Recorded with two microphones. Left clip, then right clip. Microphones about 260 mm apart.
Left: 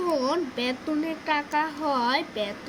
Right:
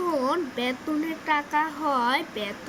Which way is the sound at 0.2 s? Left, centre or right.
Centre.